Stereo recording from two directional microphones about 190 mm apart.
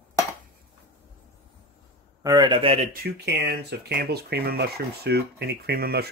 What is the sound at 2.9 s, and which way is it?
Speech, 55° right (ahead or behind).